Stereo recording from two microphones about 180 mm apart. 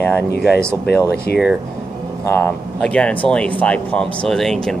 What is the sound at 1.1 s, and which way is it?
Speech, 60° left (ahead or behind).